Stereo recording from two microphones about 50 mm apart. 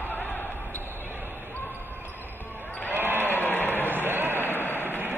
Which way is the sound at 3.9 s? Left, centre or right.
Right.